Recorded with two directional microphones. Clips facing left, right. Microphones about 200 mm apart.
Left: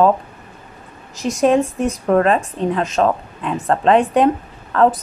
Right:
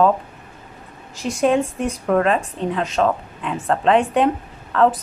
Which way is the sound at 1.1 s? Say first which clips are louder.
Left 3 dB; 40° left (ahead or behind).